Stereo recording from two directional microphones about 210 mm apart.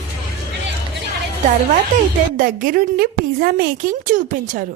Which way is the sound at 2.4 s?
45° right (ahead or behind).